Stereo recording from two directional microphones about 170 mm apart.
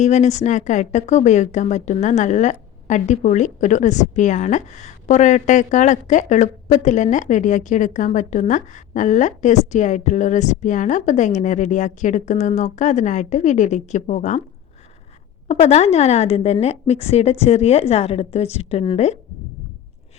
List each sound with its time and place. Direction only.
0.0 s a woman's voice: 45° left (ahead or behind)
15.4 s a woman's voice: 40° left (ahead or behind)